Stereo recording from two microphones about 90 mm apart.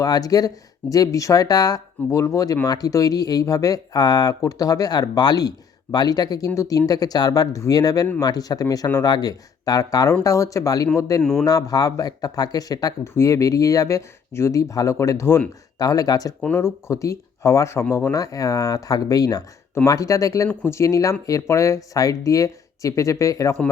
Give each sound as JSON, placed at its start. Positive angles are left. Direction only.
{"t": 0.0, "sound": "speech", "side_deg": 45}
{"t": 11.2, "sound": "a man's voice", "side_deg": 5}
{"t": 11.4, "sound": "speech", "side_deg": 45}
{"t": 15.8, "sound": "speech", "side_deg": 40}
{"t": 16.6, "sound": "speech", "side_deg": 30}